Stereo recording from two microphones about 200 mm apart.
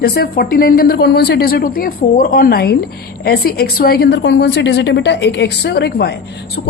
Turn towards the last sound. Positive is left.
turn(degrees=55)  # may be behind; listen again after turning